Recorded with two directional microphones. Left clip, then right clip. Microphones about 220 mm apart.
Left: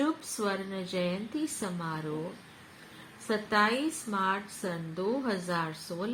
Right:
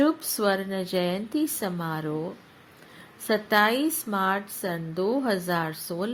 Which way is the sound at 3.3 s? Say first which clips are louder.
Right 5 dB; 40° right (ahead or behind).